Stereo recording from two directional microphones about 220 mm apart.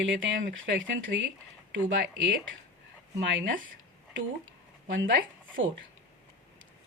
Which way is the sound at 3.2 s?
60° right (ahead or behind).